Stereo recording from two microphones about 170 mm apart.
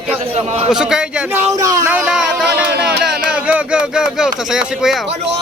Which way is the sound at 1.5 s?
20° right (ahead or behind).